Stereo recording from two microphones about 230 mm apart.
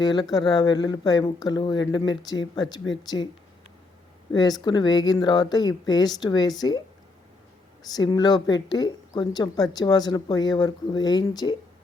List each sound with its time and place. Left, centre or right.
0.0 s speech: centre
4.6 s speech: centre
7.9 s speech: centre